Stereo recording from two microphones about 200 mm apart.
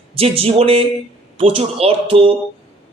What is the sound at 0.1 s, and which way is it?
Speech, 30° right (ahead or behind).